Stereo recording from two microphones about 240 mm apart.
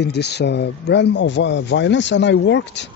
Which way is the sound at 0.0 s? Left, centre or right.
Left.